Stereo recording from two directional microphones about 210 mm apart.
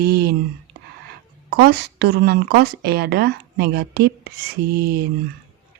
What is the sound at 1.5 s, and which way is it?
Speech, 50° right (ahead or behind).